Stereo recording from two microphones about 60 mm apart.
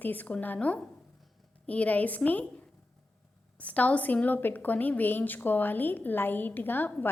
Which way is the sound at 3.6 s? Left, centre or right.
Left.